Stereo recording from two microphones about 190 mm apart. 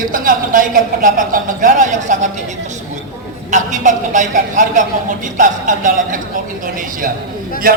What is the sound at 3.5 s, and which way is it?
A man's voice, 40° right (ahead or behind).